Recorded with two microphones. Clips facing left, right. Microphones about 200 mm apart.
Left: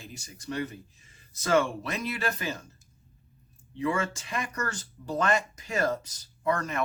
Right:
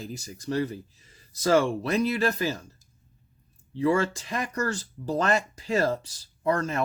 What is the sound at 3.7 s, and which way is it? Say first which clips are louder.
Speech: right 5 dB; 35° right (ahead or behind).